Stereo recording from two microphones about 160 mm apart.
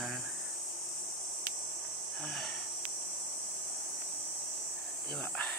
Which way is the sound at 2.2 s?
5° left (ahead or behind).